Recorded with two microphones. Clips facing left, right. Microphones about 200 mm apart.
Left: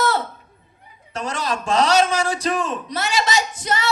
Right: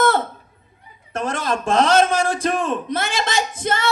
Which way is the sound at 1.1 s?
55° right (ahead or behind).